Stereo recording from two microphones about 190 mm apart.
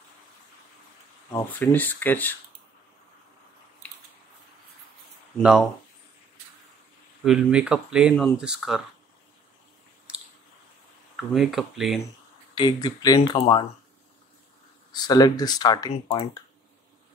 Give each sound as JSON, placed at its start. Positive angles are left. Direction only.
{"t": 1.3, "sound": "speech", "side_deg": 10}
{"t": 5.4, "sound": "speech", "side_deg": -5}
{"t": 7.2, "sound": "speech", "side_deg": -5}
{"t": 11.1, "sound": "speech", "side_deg": 0}
{"t": 12.5, "sound": "speech", "side_deg": 20}
{"t": 14.9, "sound": "speech", "side_deg": 20}